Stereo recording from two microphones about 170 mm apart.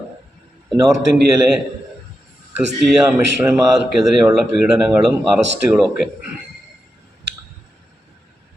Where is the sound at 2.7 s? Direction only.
5° right (ahead or behind).